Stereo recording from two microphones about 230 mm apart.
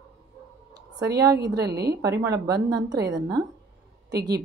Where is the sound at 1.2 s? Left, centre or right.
Centre.